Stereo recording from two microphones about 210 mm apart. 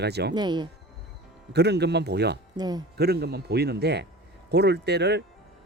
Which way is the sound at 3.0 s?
50° right (ahead or behind).